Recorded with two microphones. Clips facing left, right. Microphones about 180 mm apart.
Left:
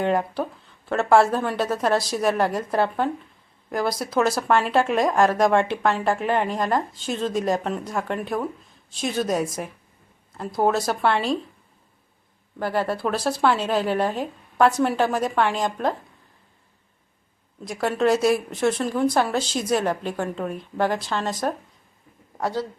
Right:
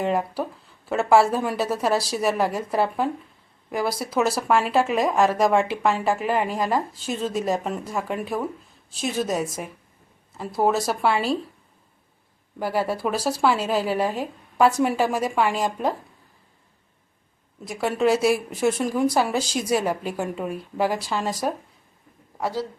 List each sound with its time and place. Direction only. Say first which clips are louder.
0.0 s speech: left 1 dB; 5° right (ahead or behind)
12.5 s speech: even; 10° right (ahead or behind)
17.7 s speech: even; 5° right (ahead or behind)